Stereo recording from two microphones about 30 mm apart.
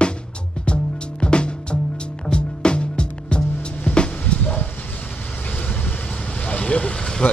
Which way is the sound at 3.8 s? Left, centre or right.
Left.